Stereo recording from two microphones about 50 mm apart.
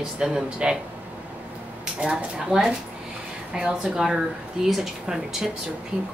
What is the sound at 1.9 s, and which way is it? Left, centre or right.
Speech, centre.